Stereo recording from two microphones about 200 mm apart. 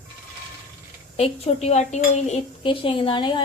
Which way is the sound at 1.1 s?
30° left (ahead or behind).